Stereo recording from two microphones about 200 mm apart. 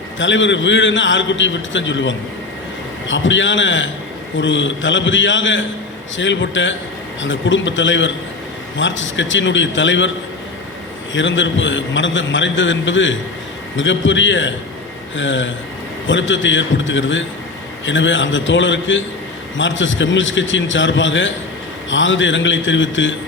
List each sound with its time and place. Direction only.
0.2 s a man's voice: 65° left (ahead or behind)
11.1 s a man's voice: 70° left (ahead or behind)